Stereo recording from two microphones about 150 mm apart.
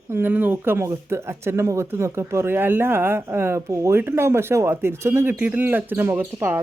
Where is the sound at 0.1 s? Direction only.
15° right (ahead or behind).